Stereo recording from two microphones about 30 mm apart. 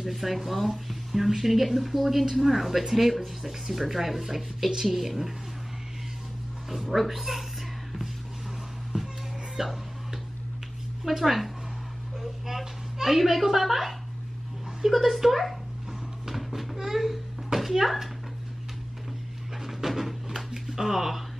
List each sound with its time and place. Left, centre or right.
0.0 s speech: centre
6.7 s speech: centre
8.9 s music: right
9.6 s music: centre
11.1 s speech: centre
12.2 s a sound: centre
14.9 s speech: centre
16.3 s a sound: centre
16.7 s babbling: centre
19.8 s a sound: centre